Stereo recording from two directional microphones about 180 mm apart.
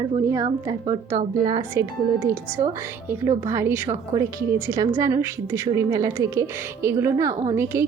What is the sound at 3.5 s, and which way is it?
A woman's voice, 15° right (ahead or behind).